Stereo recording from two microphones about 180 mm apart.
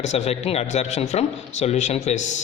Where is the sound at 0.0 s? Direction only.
35° left (ahead or behind).